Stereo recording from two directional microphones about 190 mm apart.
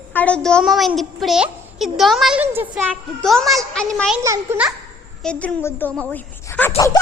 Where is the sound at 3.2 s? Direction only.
Centre (ahead or behind).